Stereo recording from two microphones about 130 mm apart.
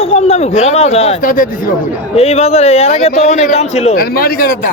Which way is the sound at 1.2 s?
90° left.